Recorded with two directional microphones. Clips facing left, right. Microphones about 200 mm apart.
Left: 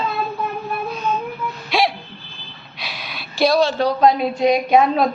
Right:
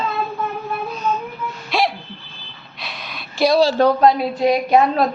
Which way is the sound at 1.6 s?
Centre (ahead or behind).